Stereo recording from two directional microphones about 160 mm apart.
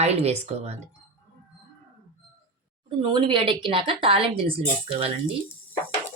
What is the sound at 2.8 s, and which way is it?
Speech, 30° right (ahead or behind).